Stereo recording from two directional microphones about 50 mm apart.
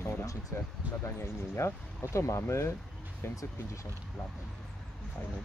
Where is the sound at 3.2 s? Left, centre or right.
Left.